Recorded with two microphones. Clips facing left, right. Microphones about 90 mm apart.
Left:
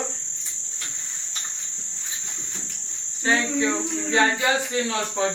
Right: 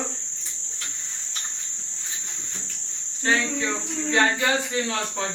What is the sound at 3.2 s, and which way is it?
Speech, 10° left (ahead or behind).